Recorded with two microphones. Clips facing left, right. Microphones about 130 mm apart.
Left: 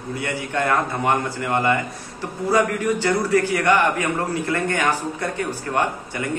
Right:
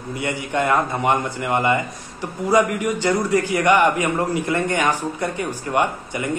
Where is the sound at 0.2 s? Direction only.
20° right (ahead or behind).